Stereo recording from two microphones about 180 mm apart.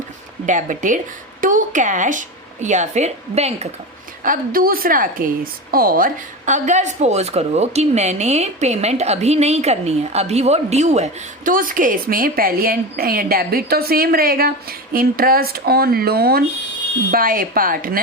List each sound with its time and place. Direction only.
0.4 s a woman's voice: 45° right (ahead or behind)
4.2 s a woman's voice: 50° right (ahead or behind)